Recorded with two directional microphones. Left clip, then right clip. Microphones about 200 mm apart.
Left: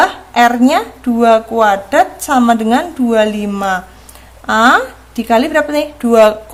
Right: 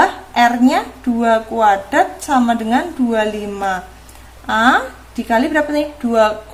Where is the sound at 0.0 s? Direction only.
30° left (ahead or behind).